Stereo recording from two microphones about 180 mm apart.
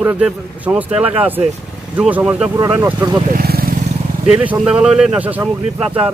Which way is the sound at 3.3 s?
55° right (ahead or behind).